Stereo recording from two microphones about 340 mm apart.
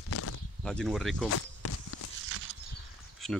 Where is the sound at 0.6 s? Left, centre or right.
Centre.